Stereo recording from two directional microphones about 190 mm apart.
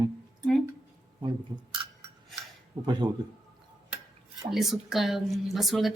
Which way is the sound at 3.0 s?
25° right (ahead or behind).